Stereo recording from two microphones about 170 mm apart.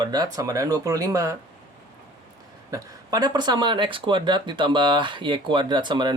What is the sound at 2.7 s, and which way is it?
Speech, 25° right (ahead or behind).